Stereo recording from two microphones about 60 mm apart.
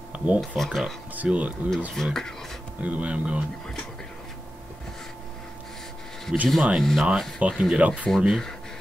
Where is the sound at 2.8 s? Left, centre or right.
Right.